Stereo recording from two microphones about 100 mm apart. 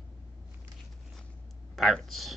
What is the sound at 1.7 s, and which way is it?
Speech, centre (ahead or behind).